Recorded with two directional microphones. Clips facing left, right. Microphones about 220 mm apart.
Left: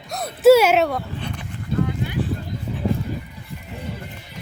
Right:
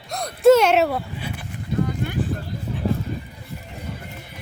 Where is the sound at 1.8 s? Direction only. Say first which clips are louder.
Even; 50° right (ahead or behind).